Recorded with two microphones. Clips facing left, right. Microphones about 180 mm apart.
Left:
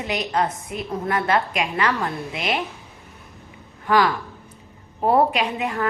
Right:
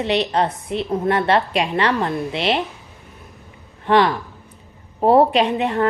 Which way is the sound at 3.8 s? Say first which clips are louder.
Right 3 dB; 30° right (ahead or behind).